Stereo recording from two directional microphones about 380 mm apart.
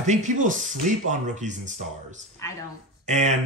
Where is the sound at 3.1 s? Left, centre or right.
Centre.